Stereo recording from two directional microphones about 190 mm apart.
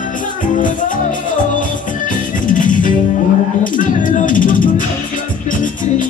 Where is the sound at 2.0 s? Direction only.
45° left (ahead or behind).